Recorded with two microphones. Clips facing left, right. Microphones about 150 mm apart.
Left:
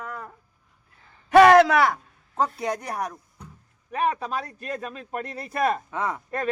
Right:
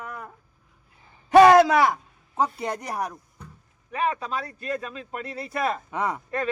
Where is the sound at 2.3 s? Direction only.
5° right (ahead or behind).